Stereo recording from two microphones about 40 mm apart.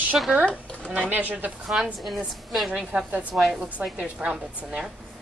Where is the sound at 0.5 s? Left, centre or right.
Left.